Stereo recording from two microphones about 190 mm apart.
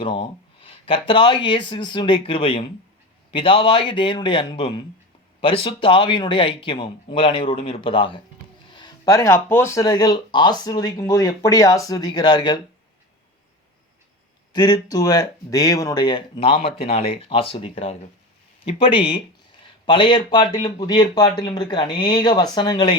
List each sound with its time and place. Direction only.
0.0 s speech: 25° left (ahead or behind)
14.5 s speech: 20° left (ahead or behind)